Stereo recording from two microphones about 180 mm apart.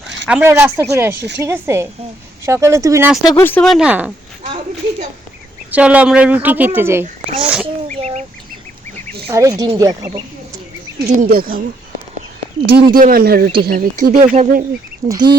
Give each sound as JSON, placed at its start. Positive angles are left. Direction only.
{"t": 0.3, "sound": "speech", "side_deg": -10}
{"t": 3.2, "sound": "speech", "side_deg": 10}
{"t": 5.7, "sound": "speech", "side_deg": -5}
{"t": 7.0, "sound": "speech", "side_deg": -40}
{"t": 7.4, "sound": "speech", "side_deg": -5}
{"t": 7.9, "sound": "bird", "side_deg": -35}
{"t": 9.3, "sound": "speech", "side_deg": -20}
{"t": 11.0, "sound": "speech", "side_deg": -50}
{"t": 12.7, "sound": "speech", "side_deg": -55}
{"t": 15.1, "sound": "speech", "side_deg": -25}